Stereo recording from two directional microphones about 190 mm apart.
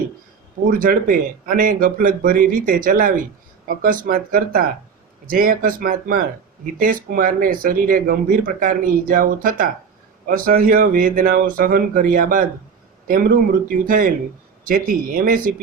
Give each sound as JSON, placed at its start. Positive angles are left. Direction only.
{"t": 0.7, "sound": "speech", "side_deg": -45}